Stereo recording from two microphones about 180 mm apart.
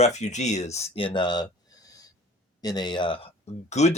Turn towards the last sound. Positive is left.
turn(degrees=40)  # may be behind; listen again after turning